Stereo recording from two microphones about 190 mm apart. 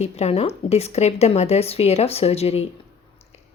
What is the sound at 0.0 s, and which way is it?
A woman's voice, 35° left (ahead or behind).